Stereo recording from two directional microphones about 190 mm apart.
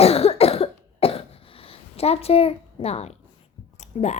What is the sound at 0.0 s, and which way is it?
Cough, 30° left (ahead or behind).